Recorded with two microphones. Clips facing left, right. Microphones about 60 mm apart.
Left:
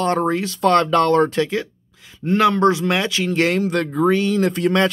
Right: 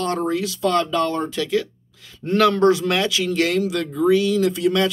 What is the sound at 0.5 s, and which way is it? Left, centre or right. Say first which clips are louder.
Speech: left 6 dB; left.